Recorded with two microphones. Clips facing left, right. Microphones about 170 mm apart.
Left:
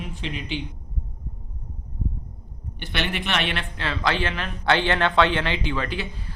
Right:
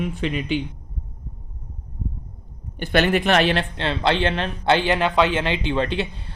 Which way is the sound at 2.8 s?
45° right (ahead or behind).